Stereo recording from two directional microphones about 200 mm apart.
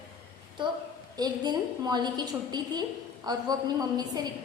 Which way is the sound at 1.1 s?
20° right (ahead or behind).